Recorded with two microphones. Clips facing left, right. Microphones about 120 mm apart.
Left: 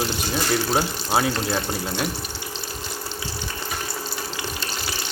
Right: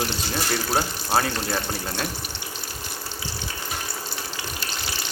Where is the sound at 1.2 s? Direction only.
15° left (ahead or behind).